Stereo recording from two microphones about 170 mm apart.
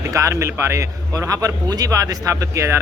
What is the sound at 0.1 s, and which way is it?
A man's voice, 20° right (ahead or behind).